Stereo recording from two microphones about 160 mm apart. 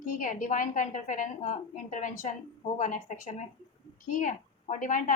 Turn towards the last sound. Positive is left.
turn(degrees=55)  # may be behind; listen again after turning